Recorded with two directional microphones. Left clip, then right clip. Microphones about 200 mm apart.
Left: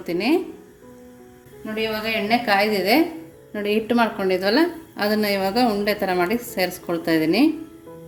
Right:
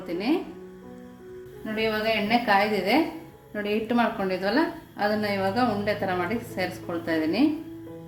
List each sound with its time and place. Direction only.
0.0 s speech: 40° left (ahead or behind)
1.7 s a woman's voice: 20° left (ahead or behind)
2.5 s a woman's voice: 35° left (ahead or behind)